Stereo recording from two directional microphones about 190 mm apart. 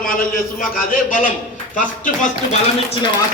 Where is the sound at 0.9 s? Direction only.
45° left (ahead or behind).